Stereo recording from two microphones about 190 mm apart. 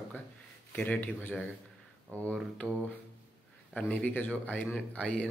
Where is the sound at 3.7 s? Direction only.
10° left (ahead or behind).